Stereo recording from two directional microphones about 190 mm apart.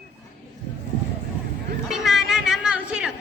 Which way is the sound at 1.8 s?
Centre (ahead or behind).